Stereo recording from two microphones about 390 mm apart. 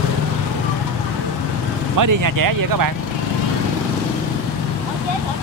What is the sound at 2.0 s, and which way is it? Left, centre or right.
Speech, right.